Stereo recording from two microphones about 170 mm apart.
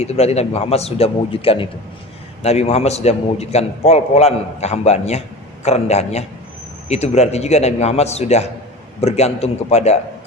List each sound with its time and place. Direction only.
0.0 s a man's voice: 40° left (ahead or behind)